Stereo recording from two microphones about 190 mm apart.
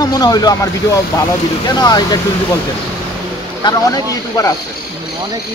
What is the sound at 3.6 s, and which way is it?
Speech, 20° left (ahead or behind).